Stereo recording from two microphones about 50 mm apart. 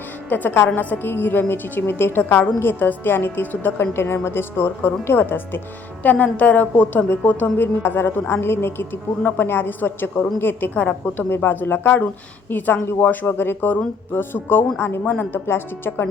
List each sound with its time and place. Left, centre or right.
0.3 s a woman's voice: left
7.6 s a woman's voice: left
10.8 s a woman's voice: left
11.3 s a woman's voice: left